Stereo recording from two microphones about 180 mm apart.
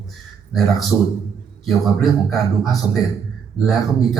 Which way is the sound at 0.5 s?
Centre (ahead or behind).